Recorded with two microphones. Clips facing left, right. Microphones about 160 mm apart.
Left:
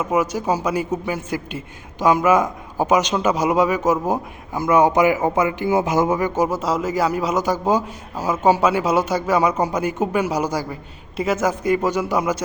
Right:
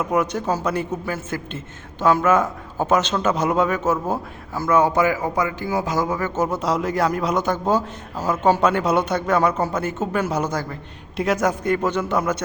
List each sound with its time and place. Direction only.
0.0 s a man's voice: 5° left (ahead or behind)